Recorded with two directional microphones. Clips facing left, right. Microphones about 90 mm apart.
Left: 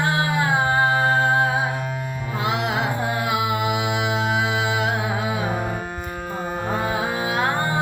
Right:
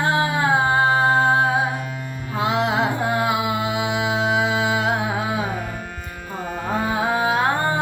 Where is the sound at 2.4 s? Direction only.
30° right (ahead or behind).